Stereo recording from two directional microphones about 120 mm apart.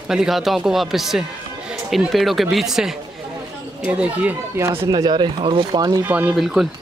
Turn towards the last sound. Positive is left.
turn(degrees=0)  # may be behind; listen again after turning